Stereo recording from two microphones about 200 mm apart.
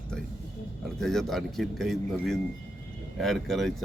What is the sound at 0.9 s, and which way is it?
Speech, centre (ahead or behind).